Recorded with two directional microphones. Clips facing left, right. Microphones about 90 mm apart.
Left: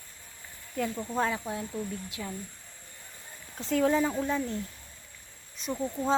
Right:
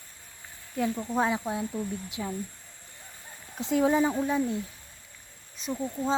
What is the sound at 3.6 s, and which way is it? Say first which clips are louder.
Speech: right 2 dB; 15° right (ahead or behind).